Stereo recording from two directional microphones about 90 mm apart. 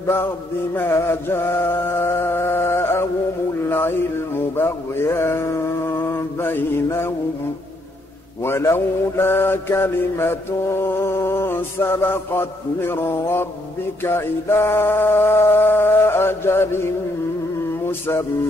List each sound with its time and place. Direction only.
0.0 s a sound: 25° left (ahead or behind)
0.7 s mantra: 30° left (ahead or behind)
3.6 s music: 25° left (ahead or behind)
4.6 s mantra: 25° left (ahead or behind)
8.4 s mantra: 30° left (ahead or behind)
17.8 s male singing: 25° left (ahead or behind)